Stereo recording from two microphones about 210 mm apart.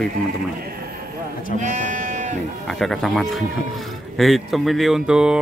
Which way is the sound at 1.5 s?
35° right (ahead or behind).